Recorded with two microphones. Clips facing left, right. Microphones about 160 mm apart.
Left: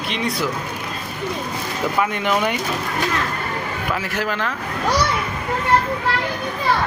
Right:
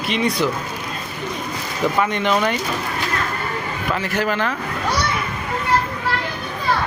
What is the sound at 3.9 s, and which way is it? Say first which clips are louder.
Speech: right 4 dB; centre (ahead or behind).